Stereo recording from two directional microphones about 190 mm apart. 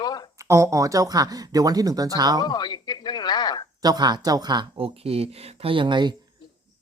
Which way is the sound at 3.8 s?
20° right (ahead or behind).